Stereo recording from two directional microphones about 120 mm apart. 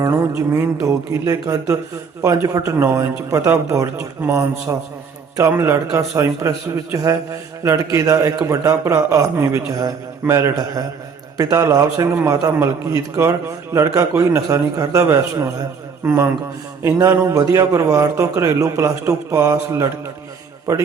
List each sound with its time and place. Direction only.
0.0 s a man's voice: 25° right (ahead or behind)